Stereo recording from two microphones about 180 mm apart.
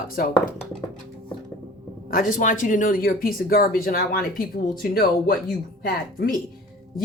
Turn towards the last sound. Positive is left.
turn(degrees=55)  # may be behind; listen again after turning